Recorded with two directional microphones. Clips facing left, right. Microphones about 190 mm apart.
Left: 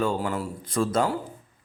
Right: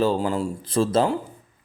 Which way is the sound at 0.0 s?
30° right (ahead or behind).